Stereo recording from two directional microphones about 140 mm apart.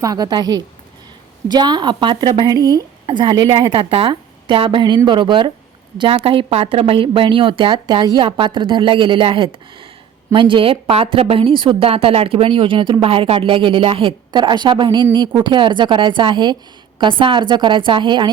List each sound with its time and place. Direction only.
0.0 s a woman's voice: 25° right (ahead or behind)